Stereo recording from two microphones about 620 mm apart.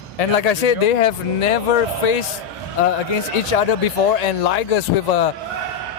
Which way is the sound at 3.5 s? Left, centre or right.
Left.